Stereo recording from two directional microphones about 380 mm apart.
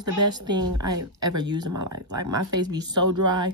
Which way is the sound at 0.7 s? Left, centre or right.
Right.